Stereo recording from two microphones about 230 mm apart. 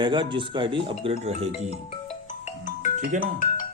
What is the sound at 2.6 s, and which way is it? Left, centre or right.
Music, left.